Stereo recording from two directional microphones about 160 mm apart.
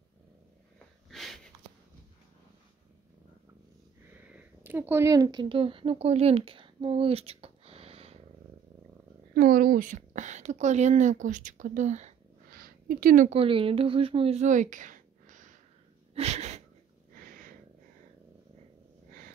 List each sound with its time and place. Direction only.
1.1 s sniff: centre (ahead or behind)
4.2 s speech: 10° right (ahead or behind); by 8.2 s 40° right (ahead or behind)
9.3 s a woman's voice: 60° right (ahead or behind)
13.3 s a woman's voice: 35° right (ahead or behind); by 15.5 s 55° right (ahead or behind)
16.2 s sneeze: 40° right (ahead or behind)
17.1 s a sound: 60° right (ahead or behind)